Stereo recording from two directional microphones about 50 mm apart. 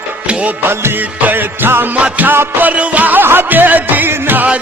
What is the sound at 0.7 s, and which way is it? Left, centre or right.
Music, right.